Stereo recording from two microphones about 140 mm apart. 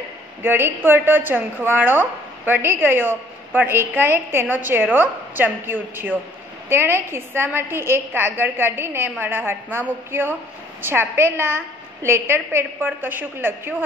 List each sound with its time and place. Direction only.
0.4 s a woman's voice: 15° right (ahead or behind)